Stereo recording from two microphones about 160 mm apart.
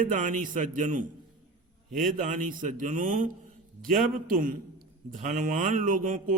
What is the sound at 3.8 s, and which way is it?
Mantra, 60° right (ahead or behind).